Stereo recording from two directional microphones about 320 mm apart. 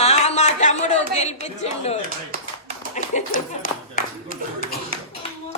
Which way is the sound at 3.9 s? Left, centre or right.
Left.